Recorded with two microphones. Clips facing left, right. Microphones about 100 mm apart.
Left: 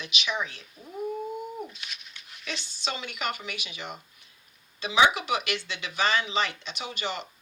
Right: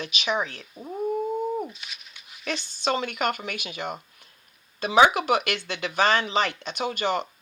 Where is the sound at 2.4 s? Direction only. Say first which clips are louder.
Right 8 dB; 50° right (ahead or behind).